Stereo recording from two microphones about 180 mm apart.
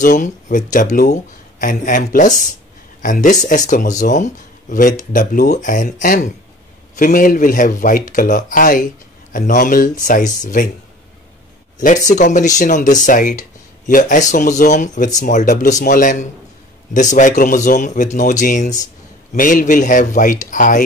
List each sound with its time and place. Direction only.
0.0 s speech: 45° left (ahead or behind)
12.1 s speech: 40° left (ahead or behind)